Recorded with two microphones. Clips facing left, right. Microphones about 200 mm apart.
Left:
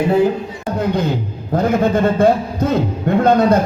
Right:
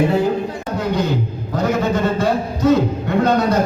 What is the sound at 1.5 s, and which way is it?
A man's voice, 55° left (ahead or behind).